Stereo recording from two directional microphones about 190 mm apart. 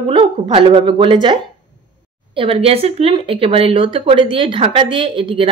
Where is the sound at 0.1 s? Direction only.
30° right (ahead or behind).